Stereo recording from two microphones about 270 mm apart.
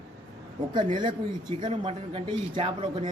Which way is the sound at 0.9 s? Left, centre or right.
Centre.